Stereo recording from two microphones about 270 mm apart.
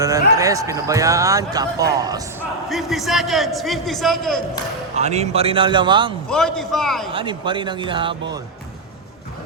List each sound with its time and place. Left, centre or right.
0.3 s speech: centre
2.6 s a man's voice: centre
4.9 s a man's voice: right
6.2 s a man's voice: centre
7.1 s speech: centre